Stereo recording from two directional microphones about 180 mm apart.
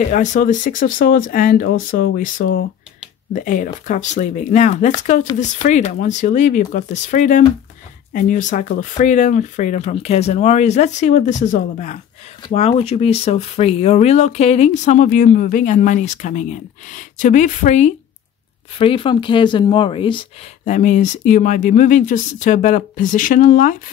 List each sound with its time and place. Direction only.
0.1 s speech: 45° left (ahead or behind)
18.8 s speech: 30° left (ahead or behind)
20.7 s speech: 40° left (ahead or behind)